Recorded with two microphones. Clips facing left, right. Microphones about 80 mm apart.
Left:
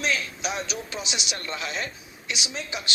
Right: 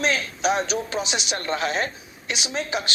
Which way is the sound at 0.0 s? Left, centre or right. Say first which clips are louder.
Right 5 dB; right.